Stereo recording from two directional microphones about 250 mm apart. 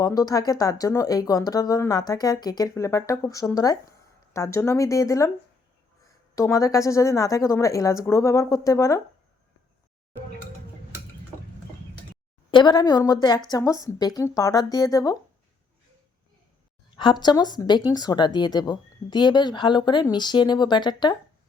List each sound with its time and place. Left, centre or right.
0.0 s speech: centre
12.5 s speech: centre
17.0 s speech: centre